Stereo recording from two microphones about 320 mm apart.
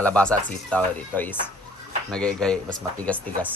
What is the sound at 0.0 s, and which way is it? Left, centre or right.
Speech, centre.